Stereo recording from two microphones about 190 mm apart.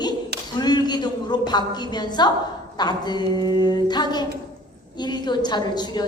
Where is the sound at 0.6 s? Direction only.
20° left (ahead or behind).